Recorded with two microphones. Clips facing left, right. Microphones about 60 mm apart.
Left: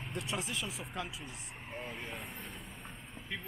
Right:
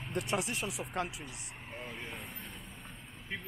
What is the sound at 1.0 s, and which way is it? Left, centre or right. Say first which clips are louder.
Speech: right 5 dB; right.